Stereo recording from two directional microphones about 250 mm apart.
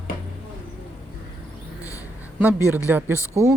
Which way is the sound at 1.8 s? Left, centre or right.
Centre.